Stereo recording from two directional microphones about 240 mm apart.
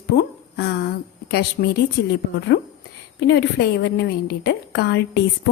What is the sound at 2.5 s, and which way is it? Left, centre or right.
A woman's voice, left.